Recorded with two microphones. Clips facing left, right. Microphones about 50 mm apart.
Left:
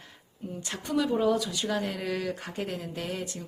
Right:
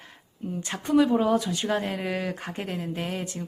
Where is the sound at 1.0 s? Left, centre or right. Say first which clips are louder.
Right 3 dB; centre.